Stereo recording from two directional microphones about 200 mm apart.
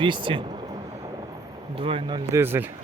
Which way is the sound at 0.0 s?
25° right (ahead or behind).